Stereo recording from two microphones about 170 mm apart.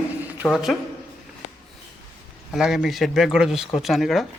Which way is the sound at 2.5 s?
5° right (ahead or behind).